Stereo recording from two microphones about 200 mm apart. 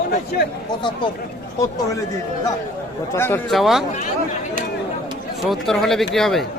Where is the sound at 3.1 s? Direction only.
10° left (ahead or behind).